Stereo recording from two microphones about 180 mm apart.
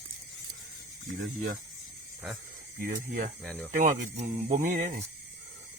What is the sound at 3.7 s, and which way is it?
Speech, 45° right (ahead or behind).